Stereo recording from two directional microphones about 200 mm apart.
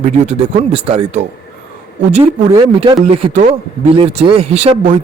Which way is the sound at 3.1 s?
35° right (ahead or behind).